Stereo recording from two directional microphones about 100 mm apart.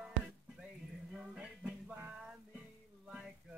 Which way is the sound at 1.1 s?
10° right (ahead or behind).